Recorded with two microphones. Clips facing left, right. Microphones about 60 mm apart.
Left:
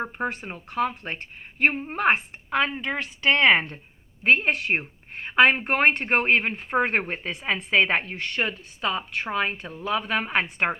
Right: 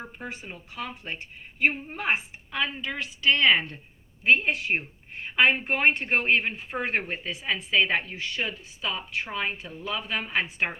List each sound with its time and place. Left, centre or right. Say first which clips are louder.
0.0 s speech: left 9 dB; left
4.2 s a woman's voice: left 2 dB; left